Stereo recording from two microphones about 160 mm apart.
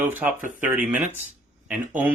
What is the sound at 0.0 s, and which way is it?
Speech, 10° right (ahead or behind).